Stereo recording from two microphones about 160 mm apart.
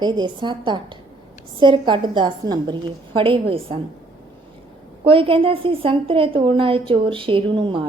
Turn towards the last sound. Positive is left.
turn(degrees=-30)  # may be behind; listen again after turning